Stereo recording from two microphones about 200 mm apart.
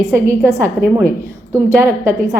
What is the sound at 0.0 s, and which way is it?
A woman's voice, 15° right (ahead or behind).